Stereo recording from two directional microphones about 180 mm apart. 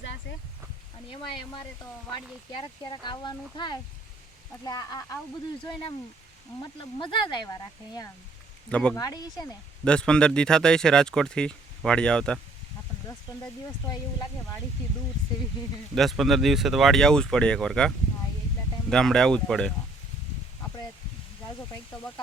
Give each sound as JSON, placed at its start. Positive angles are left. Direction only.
{"t": 0.3, "sound": "a sound", "side_deg": 70}
{"t": 2.1, "sound": "speech", "side_deg": 25}
{"t": 6.6, "sound": "speech", "side_deg": 25}
{"t": 8.7, "sound": "speech", "side_deg": 5}
{"t": 9.0, "sound": "speech", "side_deg": 20}
{"t": 9.8, "sound": "speech", "side_deg": 5}
{"t": 13.3, "sound": "speech", "side_deg": 20}
{"t": 16.0, "sound": "speech", "side_deg": 0}